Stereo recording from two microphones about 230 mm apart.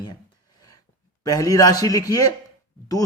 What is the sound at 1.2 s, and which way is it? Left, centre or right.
Speech, centre.